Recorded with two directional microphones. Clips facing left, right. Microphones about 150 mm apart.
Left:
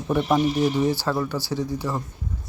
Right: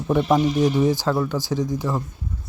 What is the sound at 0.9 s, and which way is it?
Speech, 15° right (ahead or behind).